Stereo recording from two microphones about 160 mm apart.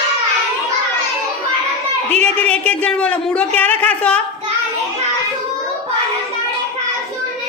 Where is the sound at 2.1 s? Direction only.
5° left (ahead or behind).